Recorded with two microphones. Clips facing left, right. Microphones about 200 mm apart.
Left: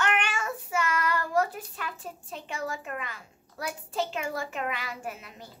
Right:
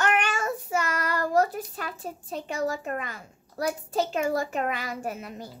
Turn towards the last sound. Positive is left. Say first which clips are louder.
# right 6 dB
turn(degrees=-45)  # may be behind; listen again after turning